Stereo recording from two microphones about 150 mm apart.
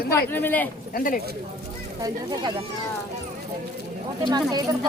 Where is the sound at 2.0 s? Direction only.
25° right (ahead or behind).